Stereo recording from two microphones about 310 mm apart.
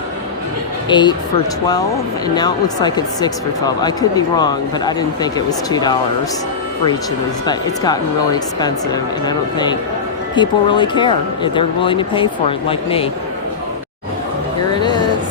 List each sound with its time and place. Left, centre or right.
0.9 s speech: centre
2.2 s speech: centre
7.4 s speech: centre
14.7 s a sound: centre